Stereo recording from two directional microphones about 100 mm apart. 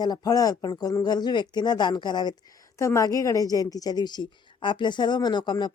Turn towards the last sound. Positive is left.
turn(degrees=45)  # may be behind; listen again after turning